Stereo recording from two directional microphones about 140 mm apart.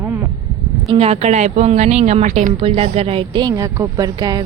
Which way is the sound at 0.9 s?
45° right (ahead or behind).